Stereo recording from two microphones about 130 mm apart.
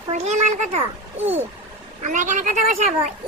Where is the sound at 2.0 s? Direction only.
75° right (ahead or behind).